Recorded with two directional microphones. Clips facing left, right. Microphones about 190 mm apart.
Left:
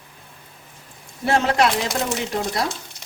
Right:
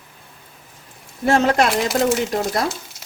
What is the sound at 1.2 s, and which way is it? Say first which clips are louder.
Speech: right 3 dB; 45° right (ahead or behind).